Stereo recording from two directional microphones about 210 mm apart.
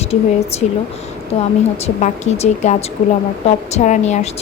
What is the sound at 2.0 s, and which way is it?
A woman's voice, 35° left (ahead or behind).